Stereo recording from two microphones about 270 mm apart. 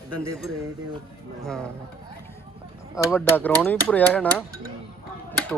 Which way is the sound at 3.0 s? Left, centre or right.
Centre.